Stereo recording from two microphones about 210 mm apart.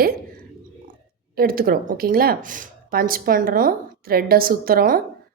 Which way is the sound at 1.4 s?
45° right (ahead or behind).